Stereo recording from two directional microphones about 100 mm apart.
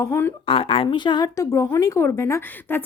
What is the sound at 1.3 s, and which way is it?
A woman's voice, 30° left (ahead or behind).